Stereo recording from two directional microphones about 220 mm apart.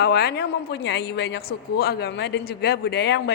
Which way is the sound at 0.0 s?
45° left (ahead or behind).